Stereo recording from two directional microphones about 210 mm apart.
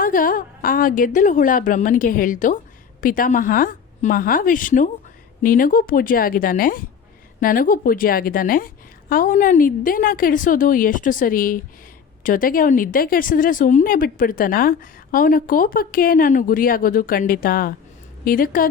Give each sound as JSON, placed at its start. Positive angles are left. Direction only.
{"t": 0.0, "sound": "a woman's voice", "side_deg": 40}